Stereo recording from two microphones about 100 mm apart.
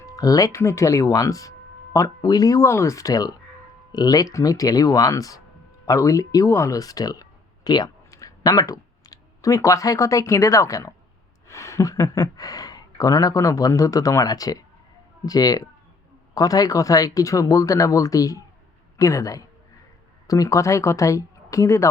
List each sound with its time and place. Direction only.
0.0 s speech: 35° left (ahead or behind)
2.6 s speech: 25° left (ahead or behind)